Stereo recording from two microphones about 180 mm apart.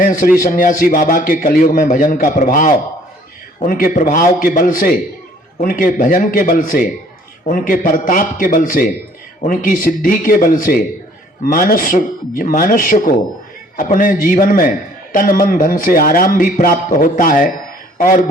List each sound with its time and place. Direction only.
0.0 s a man's voice: 50° left (ahead or behind)